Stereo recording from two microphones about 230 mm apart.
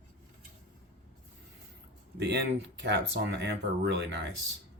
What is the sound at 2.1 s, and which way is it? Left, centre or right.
Speech, right.